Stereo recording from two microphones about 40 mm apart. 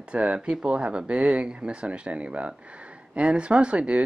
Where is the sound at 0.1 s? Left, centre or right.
Right.